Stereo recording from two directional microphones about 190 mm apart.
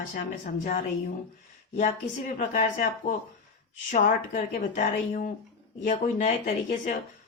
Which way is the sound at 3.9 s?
45° left (ahead or behind).